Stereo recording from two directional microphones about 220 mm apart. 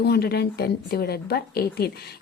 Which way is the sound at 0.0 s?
45° left (ahead or behind).